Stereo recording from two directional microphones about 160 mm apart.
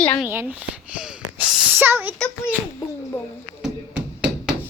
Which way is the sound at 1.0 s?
5° right (ahead or behind).